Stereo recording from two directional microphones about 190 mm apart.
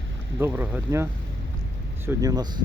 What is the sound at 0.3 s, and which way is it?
Speech, 10° right (ahead or behind).